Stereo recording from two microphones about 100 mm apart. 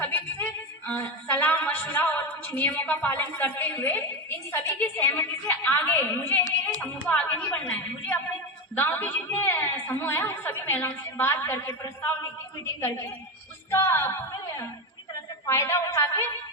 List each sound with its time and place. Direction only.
0.0 s music: 20° left (ahead or behind)
0.9 s a woman's voice: 20° left (ahead or behind)
8.7 s a woman's voice: 15° left (ahead or behind)
13.7 s speech: 30° left (ahead or behind)
15.4 s a woman's voice: 25° left (ahead or behind)